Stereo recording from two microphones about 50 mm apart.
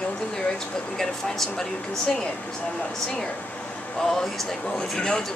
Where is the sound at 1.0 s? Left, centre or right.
Centre.